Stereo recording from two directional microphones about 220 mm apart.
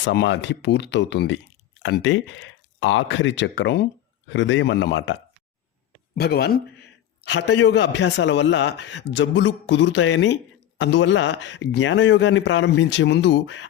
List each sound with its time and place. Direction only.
0.0 s a man's voice: 55° left (ahead or behind)
6.1 s a man's voice: 45° left (ahead or behind)